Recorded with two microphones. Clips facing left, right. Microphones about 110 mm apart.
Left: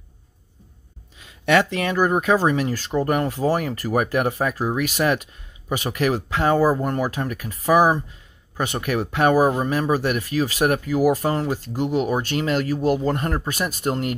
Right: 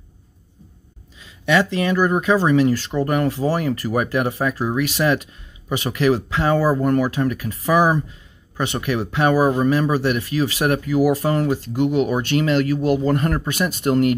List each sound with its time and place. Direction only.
1.2 s speech: 55° left (ahead or behind); by 13.5 s 30° left (ahead or behind)
13.5 s speech: 40° left (ahead or behind)